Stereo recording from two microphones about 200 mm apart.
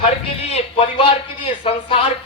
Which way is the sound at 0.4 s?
30° left (ahead or behind).